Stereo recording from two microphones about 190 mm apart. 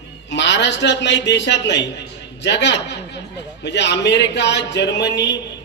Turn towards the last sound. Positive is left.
turn(degrees=65)  # may be behind; listen again after turning